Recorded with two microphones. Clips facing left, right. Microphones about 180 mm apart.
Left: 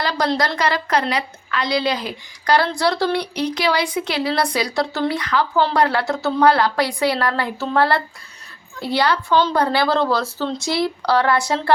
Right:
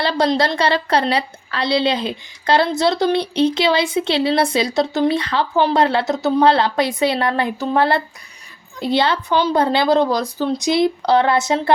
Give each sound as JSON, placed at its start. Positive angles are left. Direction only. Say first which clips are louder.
{"t": 0.0, "sound": "speech", "louder": "right 3 dB", "side_deg": -25}
{"t": 9.3, "sound": "speech", "louder": "right 2 dB", "side_deg": -15}